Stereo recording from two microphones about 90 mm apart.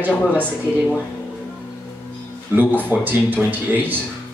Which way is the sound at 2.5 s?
20° right (ahead or behind).